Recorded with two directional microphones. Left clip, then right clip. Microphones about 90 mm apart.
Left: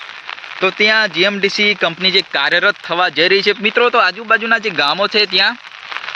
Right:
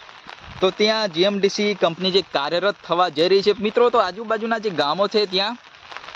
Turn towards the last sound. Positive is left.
turn(degrees=-20)  # may be behind; listen again after turning